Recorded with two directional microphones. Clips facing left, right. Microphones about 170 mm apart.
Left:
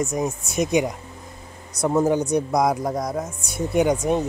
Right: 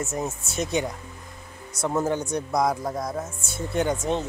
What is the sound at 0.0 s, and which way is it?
A man's voice, 15° left (ahead or behind).